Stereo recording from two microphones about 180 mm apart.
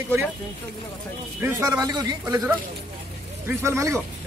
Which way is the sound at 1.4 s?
20° right (ahead or behind).